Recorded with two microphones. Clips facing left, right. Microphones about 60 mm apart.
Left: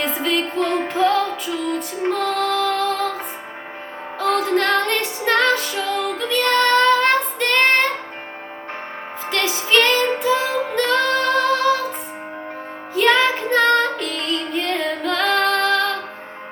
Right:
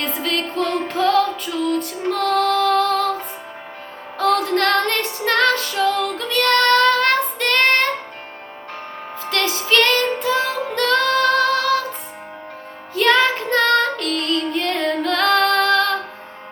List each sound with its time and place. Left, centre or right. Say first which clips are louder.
0.0 s music: left 2 dB; centre
4.2 s music: right 1 dB; centre
9.3 s music: even; centre
13.0 s music: even; centre